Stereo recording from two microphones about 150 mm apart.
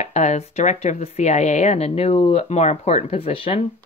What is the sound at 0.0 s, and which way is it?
Speech, 50° left (ahead or behind).